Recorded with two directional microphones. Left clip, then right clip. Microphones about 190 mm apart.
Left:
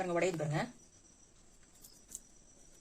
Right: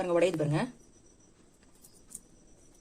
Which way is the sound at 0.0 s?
30° right (ahead or behind).